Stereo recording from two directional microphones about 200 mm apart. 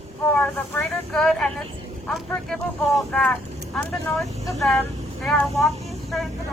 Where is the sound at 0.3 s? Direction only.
5° left (ahead or behind).